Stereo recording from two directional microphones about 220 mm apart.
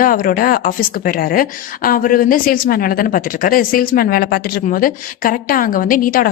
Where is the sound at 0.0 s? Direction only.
40° left (ahead or behind).